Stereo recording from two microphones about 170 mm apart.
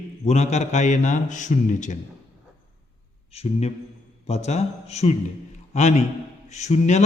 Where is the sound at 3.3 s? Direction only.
40° left (ahead or behind).